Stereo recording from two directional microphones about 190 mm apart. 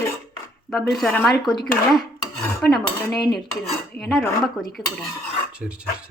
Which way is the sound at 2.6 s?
10° left (ahead or behind).